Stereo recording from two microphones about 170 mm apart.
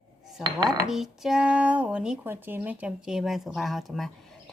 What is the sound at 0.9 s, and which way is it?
Speech, 5° right (ahead or behind).